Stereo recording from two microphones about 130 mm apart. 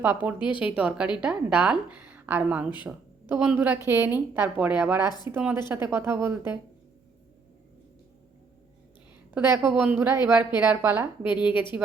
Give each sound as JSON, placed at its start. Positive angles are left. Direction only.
{"t": 0.0, "sound": "a woman's voice", "side_deg": -10}
{"t": 9.3, "sound": "a woman's voice", "side_deg": -20}